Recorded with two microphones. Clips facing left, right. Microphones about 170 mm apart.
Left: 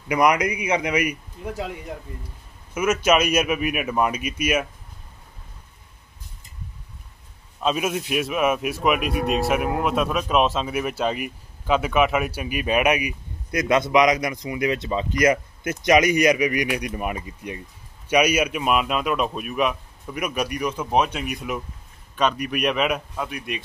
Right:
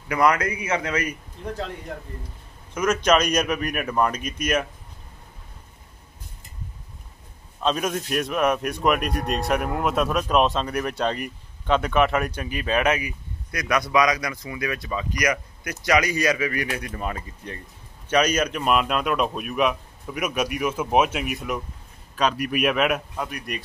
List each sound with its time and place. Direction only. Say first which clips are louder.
0.1 s speech: left 1 dB; 15° left (ahead or behind)
7.6 s a man's voice: left 1 dB; 5° left (ahead or behind)